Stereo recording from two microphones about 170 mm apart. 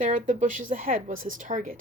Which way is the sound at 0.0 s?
50° right (ahead or behind).